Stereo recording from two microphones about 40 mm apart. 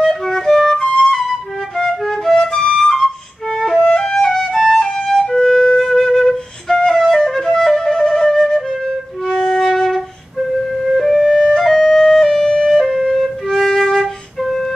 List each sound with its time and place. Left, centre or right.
0.0 s flute: centre
1.8 s music: centre
2.8 s flute: centre
4.7 s flute: centre
9.4 s music: centre
11.3 s flute: centre
11.7 s music: centre